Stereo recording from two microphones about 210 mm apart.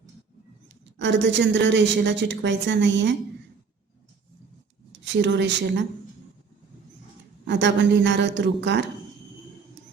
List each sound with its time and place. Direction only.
0.9 s a woman's voice: 55° right (ahead or behind)
4.9 s speech: 60° right (ahead or behind)
7.4 s a woman's voice: 55° right (ahead or behind)